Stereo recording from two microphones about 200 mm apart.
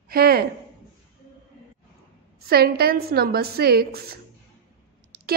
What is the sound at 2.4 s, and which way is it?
A woman's voice, 50° right (ahead or behind).